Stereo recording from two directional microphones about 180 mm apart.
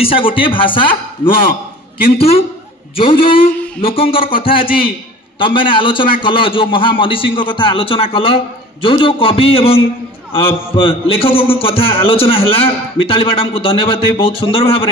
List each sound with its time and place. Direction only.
0.0 s a man's voice: 30° left (ahead or behind)